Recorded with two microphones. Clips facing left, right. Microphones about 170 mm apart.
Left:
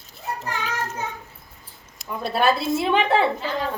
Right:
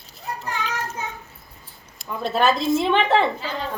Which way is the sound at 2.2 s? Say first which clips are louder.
Right 1 dB; 10° left (ahead or behind).